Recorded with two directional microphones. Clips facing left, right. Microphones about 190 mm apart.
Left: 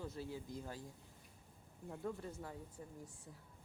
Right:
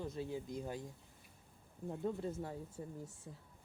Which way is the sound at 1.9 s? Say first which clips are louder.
Right 5 dB; 25° right (ahead or behind).